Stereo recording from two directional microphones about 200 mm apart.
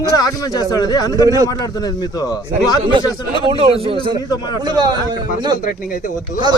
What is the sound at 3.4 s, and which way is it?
Speech, 30° right (ahead or behind).